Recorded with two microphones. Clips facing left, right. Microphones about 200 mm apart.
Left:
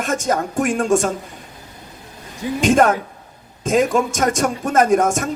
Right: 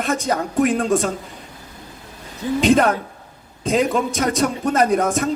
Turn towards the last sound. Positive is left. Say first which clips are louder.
# left 2 dB
turn(degrees=45)  # may be behind; listen again after turning